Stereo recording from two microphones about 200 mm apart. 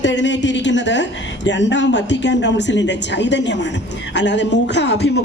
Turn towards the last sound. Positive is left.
turn(degrees=60)  # may be behind; listen again after turning